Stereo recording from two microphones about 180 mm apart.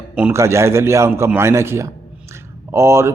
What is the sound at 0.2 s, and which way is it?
Speech, 10° right (ahead or behind).